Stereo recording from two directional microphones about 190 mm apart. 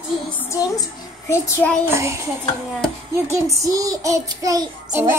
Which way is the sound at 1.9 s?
15° right (ahead or behind).